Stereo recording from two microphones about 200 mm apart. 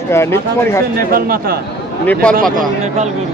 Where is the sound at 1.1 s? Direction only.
45° right (ahead or behind).